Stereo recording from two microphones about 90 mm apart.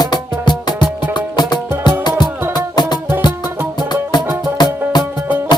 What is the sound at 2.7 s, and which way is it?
Music, 50° left (ahead or behind).